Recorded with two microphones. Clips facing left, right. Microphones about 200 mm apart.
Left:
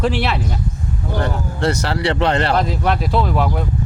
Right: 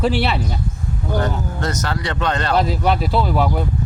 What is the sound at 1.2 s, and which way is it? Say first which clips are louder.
Speech: left 6 dB; 30° left (ahead or behind).